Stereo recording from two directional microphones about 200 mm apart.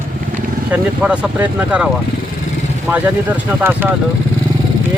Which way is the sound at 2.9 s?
10° right (ahead or behind).